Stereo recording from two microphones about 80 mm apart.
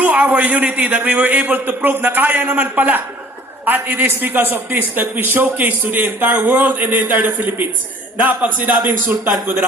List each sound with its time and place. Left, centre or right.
0.0 s a man's voice: centre